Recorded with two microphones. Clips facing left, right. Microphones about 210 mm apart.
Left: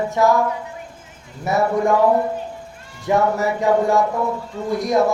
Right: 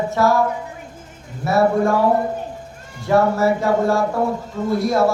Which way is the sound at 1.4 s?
20° left (ahead or behind).